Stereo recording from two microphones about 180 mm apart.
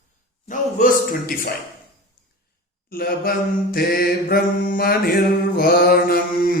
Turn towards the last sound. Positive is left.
turn(degrees=55)  # may be behind; listen again after turning